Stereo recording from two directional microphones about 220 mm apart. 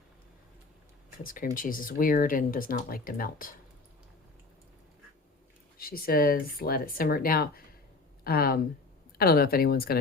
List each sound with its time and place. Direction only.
1.2 s speech: 40° left (ahead or behind)
5.7 s a woman's voice: 40° left (ahead or behind)